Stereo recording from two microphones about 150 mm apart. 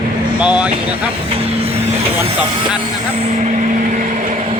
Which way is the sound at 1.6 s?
40° right (ahead or behind).